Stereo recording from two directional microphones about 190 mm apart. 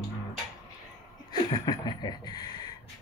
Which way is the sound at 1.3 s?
20° left (ahead or behind).